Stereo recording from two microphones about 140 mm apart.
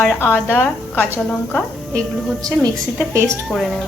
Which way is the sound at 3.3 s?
Centre (ahead or behind).